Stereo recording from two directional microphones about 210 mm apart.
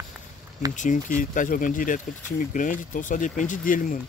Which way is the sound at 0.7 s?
35° left (ahead or behind).